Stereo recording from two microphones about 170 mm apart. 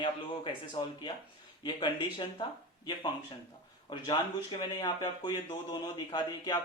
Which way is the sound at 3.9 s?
25° left (ahead or behind).